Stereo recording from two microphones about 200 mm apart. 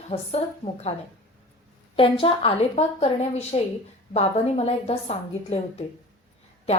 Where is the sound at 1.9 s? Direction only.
25° left (ahead or behind).